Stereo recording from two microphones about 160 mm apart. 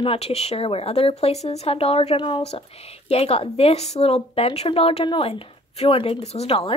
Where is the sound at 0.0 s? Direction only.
35° left (ahead or behind).